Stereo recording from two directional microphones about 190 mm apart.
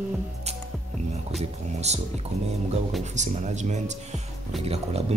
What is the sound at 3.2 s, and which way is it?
A woman's voice, 40° right (ahead or behind).